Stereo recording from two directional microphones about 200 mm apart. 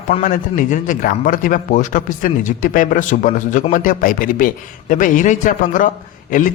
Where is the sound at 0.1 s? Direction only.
40° left (ahead or behind).